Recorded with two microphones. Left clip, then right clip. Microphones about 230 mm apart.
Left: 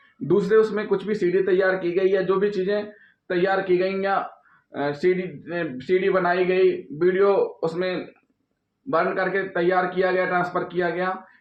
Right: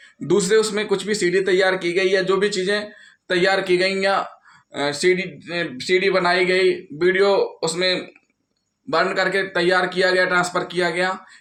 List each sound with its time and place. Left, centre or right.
0.3 s speech: right